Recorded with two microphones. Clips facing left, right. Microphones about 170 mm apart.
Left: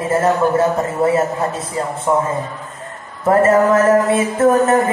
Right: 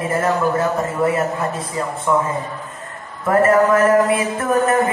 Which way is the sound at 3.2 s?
25° left (ahead or behind).